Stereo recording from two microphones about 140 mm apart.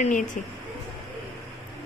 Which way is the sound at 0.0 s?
65° left (ahead or behind).